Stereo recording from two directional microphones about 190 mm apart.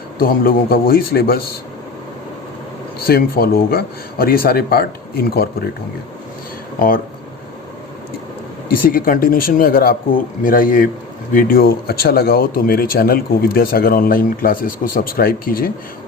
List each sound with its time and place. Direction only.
0.2 s speech: 50° left (ahead or behind)
3.0 s speech: 50° left (ahead or behind)
6.7 s speech: 50° left (ahead or behind)
8.7 s speech: 50° left (ahead or behind)